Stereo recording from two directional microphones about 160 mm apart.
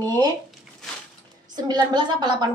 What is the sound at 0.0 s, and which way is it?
Speech, 25° right (ahead or behind).